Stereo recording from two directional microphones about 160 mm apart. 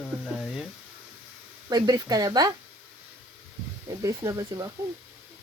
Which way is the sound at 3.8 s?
20° right (ahead or behind).